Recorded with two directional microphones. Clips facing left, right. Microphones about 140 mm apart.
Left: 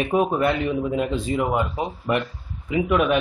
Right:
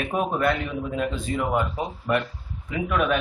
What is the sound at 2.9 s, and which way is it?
Speech, 10° left (ahead or behind).